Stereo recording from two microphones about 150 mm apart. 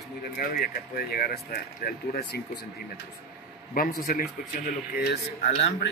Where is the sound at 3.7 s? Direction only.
75° left (ahead or behind).